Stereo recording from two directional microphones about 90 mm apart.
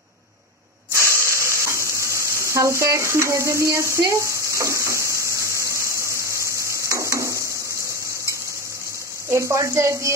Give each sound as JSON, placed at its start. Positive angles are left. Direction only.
{"t": 0.9, "sound": "water tap", "side_deg": -30}
{"t": 9.3, "sound": "speech", "side_deg": -35}